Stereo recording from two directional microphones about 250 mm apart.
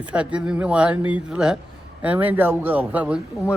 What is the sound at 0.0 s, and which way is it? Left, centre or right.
Mantra, centre.